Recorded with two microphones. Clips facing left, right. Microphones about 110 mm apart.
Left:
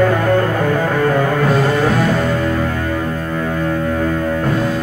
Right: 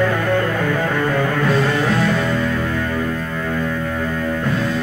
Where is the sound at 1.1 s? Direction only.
40° left (ahead or behind).